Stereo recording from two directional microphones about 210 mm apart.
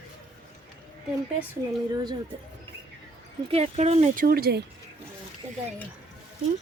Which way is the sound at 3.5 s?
30° right (ahead or behind).